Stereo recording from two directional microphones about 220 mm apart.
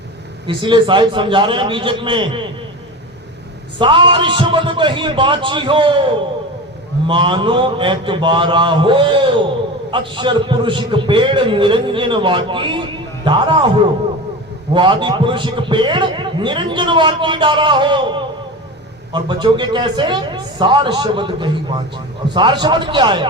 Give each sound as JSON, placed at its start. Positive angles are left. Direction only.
{"t": 0.4, "sound": "a man's voice", "side_deg": -20}
{"t": 3.8, "sound": "a man's voice", "side_deg": -20}